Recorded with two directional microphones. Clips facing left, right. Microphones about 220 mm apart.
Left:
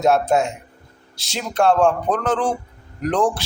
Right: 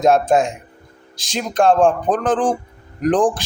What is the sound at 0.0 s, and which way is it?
A man's voice, 15° right (ahead or behind).